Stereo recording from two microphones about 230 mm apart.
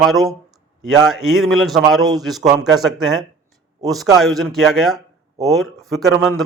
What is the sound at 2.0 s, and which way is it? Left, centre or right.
Speech, centre.